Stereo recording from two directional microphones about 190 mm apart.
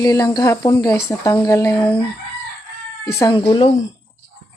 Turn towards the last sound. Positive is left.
turn(degrees=30)  # may be behind; listen again after turning